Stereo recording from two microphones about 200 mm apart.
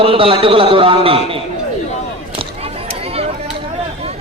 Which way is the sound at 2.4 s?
30° right (ahead or behind).